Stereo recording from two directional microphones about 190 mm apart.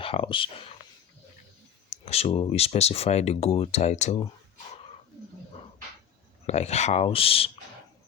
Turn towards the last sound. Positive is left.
turn(degrees=30)  # may be behind; listen again after turning